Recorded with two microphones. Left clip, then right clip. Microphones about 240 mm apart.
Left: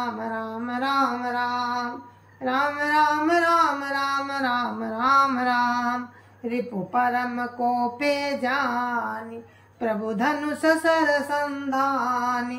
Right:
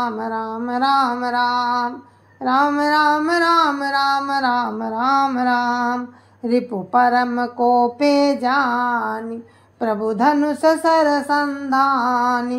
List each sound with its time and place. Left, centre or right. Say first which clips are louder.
0.0 s female singing: right 6 dB; right